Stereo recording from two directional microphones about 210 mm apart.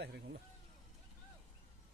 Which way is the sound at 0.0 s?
50° right (ahead or behind).